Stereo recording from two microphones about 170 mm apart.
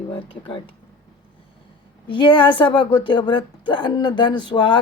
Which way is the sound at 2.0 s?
30° left (ahead or behind).